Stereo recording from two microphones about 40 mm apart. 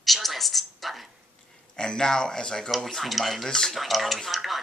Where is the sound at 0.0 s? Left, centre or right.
Centre.